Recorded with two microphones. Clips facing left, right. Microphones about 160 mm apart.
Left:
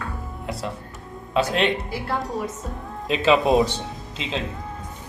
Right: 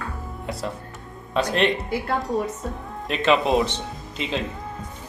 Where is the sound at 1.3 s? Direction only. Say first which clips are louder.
Even; centre (ahead or behind).